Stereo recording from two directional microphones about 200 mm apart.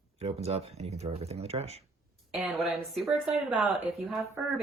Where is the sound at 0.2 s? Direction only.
30° right (ahead or behind).